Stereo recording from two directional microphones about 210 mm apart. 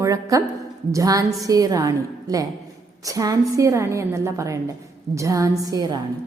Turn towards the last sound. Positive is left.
turn(degrees=-15)  # may be behind; listen again after turning